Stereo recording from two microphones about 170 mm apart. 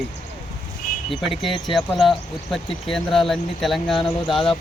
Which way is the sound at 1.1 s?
Centre (ahead or behind).